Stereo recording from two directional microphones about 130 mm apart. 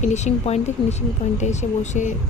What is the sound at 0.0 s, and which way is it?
Speech, 60° left (ahead or behind).